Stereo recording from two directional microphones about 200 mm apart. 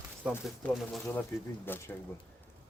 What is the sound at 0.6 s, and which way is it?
Speech, 10° left (ahead or behind).